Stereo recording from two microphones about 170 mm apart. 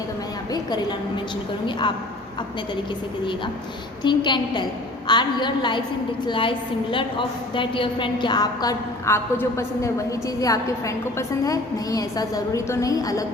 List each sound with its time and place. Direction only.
0.5 s a woman's voice: 25° left (ahead or behind)
4.0 s a woman's voice: 25° left (ahead or behind)